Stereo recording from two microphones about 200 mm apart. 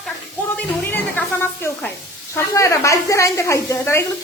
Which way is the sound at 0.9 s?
10° left (ahead or behind).